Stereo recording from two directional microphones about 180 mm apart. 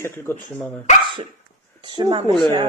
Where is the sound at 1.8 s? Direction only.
25° right (ahead or behind).